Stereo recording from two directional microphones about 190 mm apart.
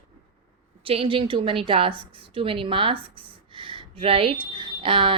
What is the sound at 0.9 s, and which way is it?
A woman's voice, 30° right (ahead or behind).